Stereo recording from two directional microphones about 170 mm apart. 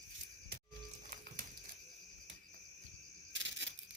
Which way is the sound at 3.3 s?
90° right.